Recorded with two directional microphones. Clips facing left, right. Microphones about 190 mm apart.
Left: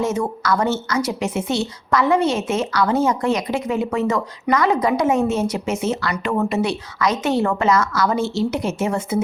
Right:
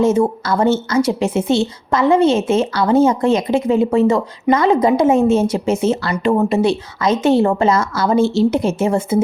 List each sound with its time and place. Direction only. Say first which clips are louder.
0.0 s a woman's voice: right 7 dB; 30° right (ahead or behind)